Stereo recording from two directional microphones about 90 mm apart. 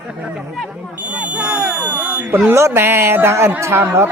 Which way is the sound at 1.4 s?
15° right (ahead or behind).